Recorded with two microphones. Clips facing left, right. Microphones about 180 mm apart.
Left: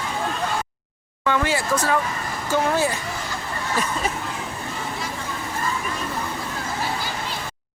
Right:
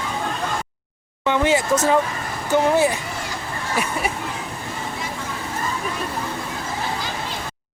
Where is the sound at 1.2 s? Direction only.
20° right (ahead or behind).